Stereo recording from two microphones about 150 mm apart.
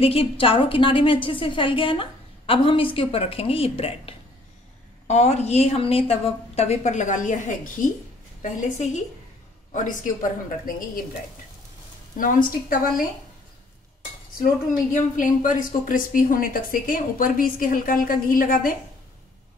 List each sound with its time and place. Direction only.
0.0 s a woman's voice: 40° left (ahead or behind); by 9.0 s 55° left (ahead or behind)
10.6 s speech: 70° left (ahead or behind)
12.2 s speech: 65° left (ahead or behind)
14.4 s speech: 60° left (ahead or behind)